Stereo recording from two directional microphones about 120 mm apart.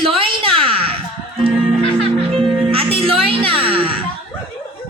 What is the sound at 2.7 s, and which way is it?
Music, 50° right (ahead or behind).